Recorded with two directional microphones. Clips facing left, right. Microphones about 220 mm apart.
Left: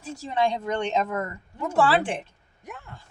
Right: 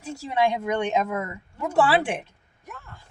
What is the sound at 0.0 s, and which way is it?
A woman's voice, 10° right (ahead or behind).